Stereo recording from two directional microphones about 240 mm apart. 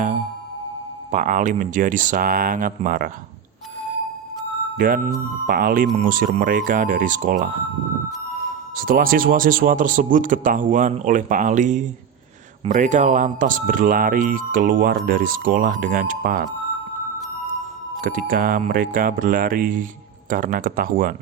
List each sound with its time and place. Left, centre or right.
1.1 s speech: right
4.8 s speech: right
8.7 s speech: right
18.0 s speech: right